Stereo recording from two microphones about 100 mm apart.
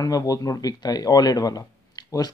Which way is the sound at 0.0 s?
40° left (ahead or behind).